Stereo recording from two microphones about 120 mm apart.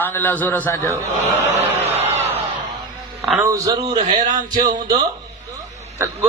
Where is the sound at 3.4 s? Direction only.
25° right (ahead or behind).